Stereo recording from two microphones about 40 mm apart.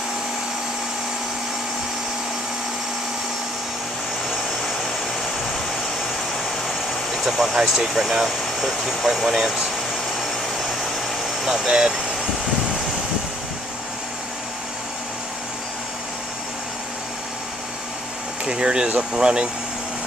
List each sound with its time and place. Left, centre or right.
6.7 s speech: centre
11.4 s speech: centre
18.4 s speech: right